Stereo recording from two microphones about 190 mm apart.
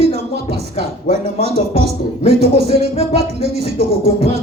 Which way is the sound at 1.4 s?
60° right (ahead or behind).